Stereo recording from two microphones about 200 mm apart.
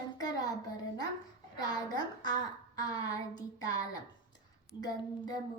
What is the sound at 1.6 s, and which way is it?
Speech, 20° left (ahead or behind).